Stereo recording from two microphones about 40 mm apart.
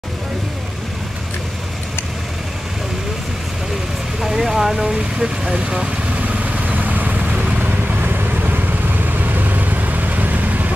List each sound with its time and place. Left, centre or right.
4.2 s speech: centre
6.2 s vehicle: right
7.8 s vehicle: right